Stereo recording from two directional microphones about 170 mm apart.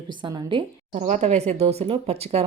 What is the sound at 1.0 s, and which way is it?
Speech, 40° right (ahead or behind).